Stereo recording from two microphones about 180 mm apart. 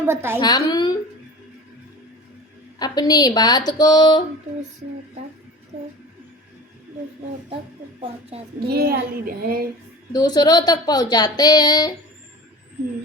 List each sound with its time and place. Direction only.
0.0 s a child's voice: 15° right (ahead or behind)
0.4 s speech: 20° left (ahead or behind)
2.7 s speech: 20° left (ahead or behind)
8.7 s speech: 55° right (ahead or behind)
10.1 s speech: 20° left (ahead or behind)